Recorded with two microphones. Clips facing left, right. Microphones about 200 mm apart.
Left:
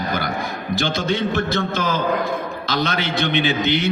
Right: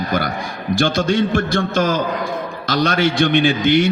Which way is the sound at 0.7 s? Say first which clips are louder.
Right 5 dB; 50° right (ahead or behind).